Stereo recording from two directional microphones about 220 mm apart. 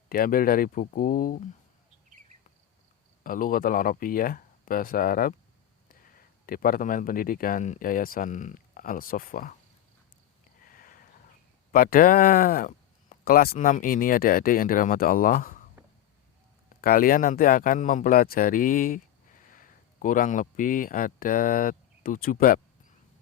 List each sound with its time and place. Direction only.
0.1 s speech: 40° left (ahead or behind)
3.2 s speech: 40° left (ahead or behind)
10.7 s a sound: 40° left (ahead or behind)
11.7 s speech: 40° left (ahead or behind)
16.8 s a man's voice: 40° left (ahead or behind)